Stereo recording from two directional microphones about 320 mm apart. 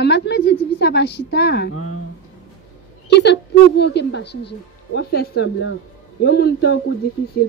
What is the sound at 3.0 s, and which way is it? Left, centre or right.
A woman's voice, left.